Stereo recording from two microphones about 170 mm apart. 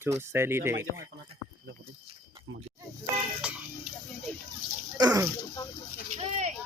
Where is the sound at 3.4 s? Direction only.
5° right (ahead or behind).